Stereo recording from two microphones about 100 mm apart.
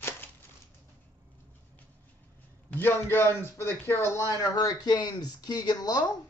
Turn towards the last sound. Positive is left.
turn(degrees=40)  # may be behind; listen again after turning